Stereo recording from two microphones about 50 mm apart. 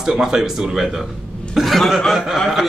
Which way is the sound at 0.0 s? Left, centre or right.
Centre.